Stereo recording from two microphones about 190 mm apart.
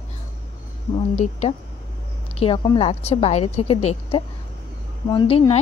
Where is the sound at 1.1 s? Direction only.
35° left (ahead or behind).